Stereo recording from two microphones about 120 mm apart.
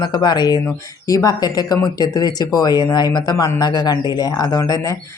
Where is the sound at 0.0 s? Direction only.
35° left (ahead or behind).